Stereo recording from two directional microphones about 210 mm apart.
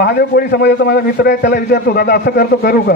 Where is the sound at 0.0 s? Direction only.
50° left (ahead or behind).